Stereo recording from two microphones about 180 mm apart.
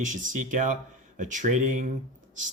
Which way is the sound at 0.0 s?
45° right (ahead or behind).